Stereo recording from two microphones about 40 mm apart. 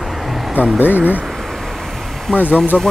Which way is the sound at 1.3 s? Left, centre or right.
Centre.